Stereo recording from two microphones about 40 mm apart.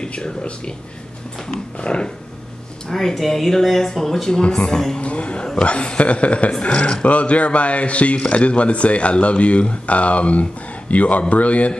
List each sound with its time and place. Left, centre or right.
0.0 s speech: left
1.8 s speech: left
2.9 s speech: centre
4.9 s speech: left